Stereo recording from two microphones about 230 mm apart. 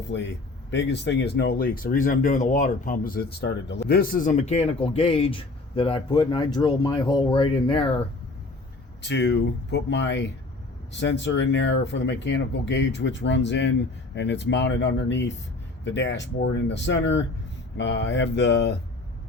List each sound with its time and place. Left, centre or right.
0.1 s speech: left
9.0 s speech: left